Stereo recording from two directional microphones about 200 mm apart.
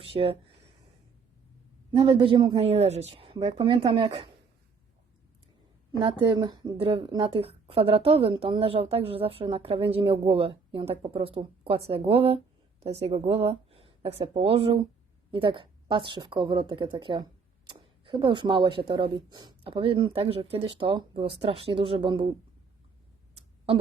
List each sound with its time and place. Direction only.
0.0 s speech: 30° right (ahead or behind)
1.9 s speech: 25° right (ahead or behind)
6.0 s speech: 25° right (ahead or behind)